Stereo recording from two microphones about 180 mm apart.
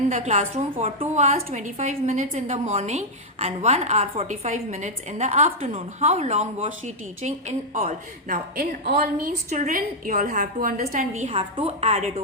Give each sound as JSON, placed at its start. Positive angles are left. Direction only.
{"t": 0.1, "sound": "a woman's voice", "side_deg": -40}
{"t": 8.9, "sound": "a woman's voice", "side_deg": -50}
{"t": 11.3, "sound": "a woman's voice", "side_deg": -30}